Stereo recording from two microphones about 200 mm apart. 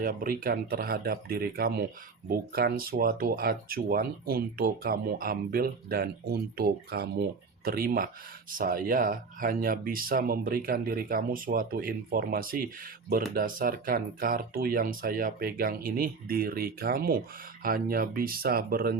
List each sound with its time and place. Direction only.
0.0 s speech: 45° right (ahead or behind)